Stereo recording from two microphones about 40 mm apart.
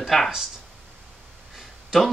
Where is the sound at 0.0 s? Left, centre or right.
Centre.